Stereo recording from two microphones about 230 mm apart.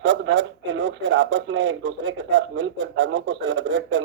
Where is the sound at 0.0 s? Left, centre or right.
Right.